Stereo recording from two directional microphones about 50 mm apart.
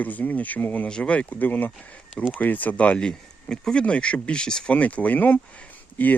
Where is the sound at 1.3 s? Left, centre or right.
Left.